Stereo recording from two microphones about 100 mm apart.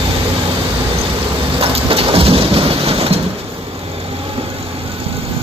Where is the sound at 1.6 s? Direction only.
70° right (ahead or behind).